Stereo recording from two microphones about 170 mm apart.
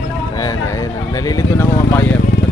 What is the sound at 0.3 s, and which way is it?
Speech, 20° left (ahead or behind).